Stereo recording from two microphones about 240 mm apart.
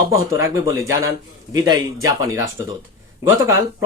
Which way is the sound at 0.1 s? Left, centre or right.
Centre.